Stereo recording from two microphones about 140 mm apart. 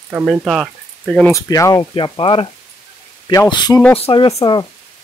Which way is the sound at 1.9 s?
35° left (ahead or behind).